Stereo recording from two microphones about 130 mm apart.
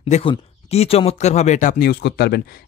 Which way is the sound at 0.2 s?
50° left (ahead or behind).